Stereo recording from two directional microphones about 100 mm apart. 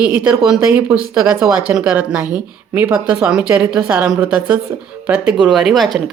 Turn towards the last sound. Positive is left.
turn(degrees=0)  # may be behind; listen again after turning